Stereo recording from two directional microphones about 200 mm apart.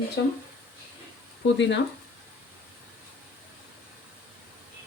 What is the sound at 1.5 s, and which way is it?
Speech, 60° left (ahead or behind).